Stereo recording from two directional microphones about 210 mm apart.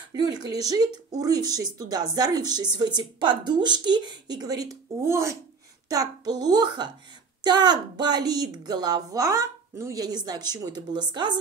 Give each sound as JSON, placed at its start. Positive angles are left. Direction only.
{"t": 0.1, "sound": "speech", "side_deg": -20}